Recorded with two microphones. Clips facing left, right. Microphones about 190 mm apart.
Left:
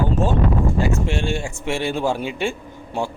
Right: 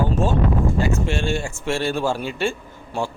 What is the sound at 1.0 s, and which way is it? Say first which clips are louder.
A man's voice: even; 15° left (ahead or behind).